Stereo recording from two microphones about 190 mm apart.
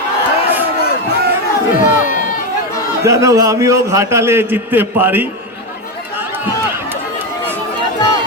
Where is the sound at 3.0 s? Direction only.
15° right (ahead or behind).